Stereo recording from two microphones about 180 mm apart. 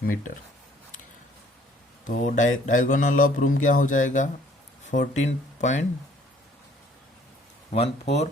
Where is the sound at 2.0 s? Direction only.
45° left (ahead or behind).